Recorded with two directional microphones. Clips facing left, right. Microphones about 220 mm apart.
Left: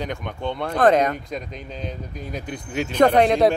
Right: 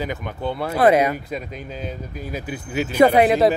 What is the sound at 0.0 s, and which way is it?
Speech, 5° right (ahead or behind).